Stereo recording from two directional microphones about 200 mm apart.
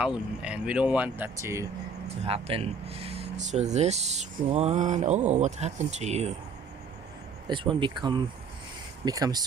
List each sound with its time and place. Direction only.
0.0 s speech: 5° right (ahead or behind)
2.2 s speech: 30° right (ahead or behind)
7.4 s speech: 25° right (ahead or behind)